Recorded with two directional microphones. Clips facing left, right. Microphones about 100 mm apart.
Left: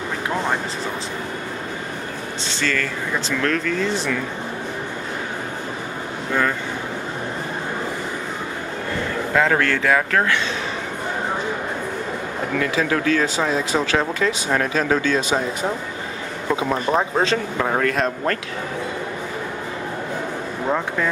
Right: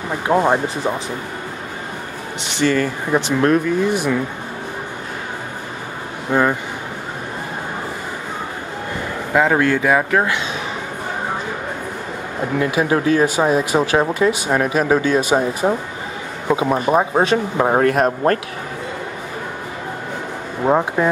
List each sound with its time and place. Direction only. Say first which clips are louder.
0.3 s speech: right 9 dB; 25° right (ahead or behind)
2.4 s speech: right 7 dB; 20° right (ahead or behind)
6.3 s speech: right 5 dB; 15° right (ahead or behind)
9.3 s speech: right 4 dB; 15° right (ahead or behind)
12.5 s speech: right 4 dB; 25° right (ahead or behind)
17.6 s speech: right 6 dB; 35° right (ahead or behind)
20.6 s speech: right 7 dB; 30° right (ahead or behind)